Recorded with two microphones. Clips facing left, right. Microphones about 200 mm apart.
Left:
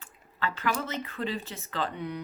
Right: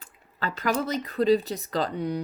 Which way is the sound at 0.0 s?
40° right (ahead or behind).